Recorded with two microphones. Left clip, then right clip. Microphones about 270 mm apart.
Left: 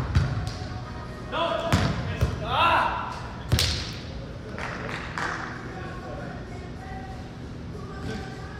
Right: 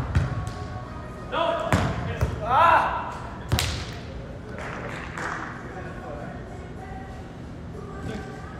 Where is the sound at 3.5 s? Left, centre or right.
Right.